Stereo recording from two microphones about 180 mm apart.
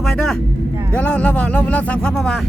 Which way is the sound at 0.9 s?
5° left (ahead or behind).